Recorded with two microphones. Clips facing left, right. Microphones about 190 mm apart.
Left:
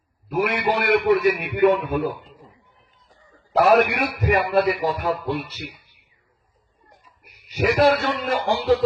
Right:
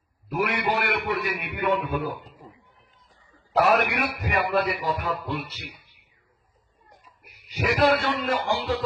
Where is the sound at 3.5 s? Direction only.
40° left (ahead or behind).